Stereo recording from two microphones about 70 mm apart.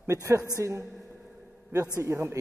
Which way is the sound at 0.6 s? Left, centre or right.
Right.